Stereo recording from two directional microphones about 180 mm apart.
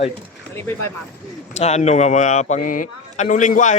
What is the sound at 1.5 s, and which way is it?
A man's voice, 40° left (ahead or behind).